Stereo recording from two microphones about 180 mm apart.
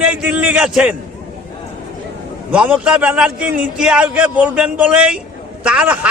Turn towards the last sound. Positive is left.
turn(degrees=-5)  # may be behind; listen again after turning